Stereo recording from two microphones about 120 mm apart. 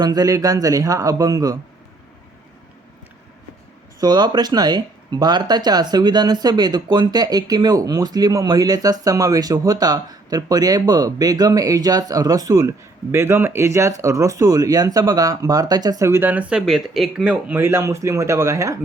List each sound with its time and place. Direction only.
0.0 s speech: 30° right (ahead or behind)
4.0 s speech: 35° right (ahead or behind); by 17.3 s 5° right (ahead or behind)
17.5 s speech: 20° right (ahead or behind)